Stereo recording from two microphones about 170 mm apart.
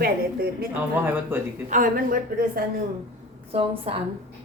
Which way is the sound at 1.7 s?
55° right (ahead or behind).